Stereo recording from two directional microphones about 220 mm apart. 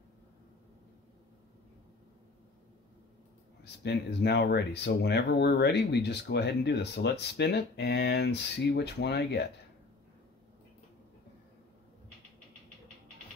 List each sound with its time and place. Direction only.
3.6 s speech: 50° left (ahead or behind)